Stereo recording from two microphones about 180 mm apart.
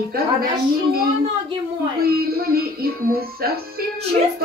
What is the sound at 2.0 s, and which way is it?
A woman's voice, 60° right (ahead or behind).